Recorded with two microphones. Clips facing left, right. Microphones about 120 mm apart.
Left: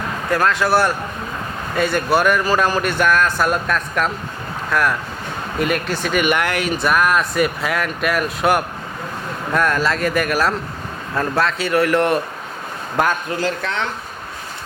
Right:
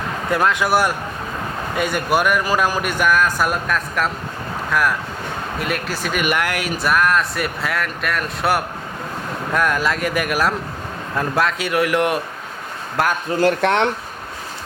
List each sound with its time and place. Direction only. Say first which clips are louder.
0.3 s a man's voice: left 1 dB; 20° right (ahead or behind)
13.4 s speech: right 11 dB; 60° right (ahead or behind)